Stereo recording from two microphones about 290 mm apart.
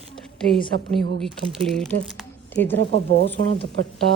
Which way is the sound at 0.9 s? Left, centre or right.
Centre.